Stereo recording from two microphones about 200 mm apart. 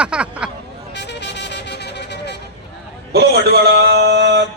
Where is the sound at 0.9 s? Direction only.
60° left (ahead or behind).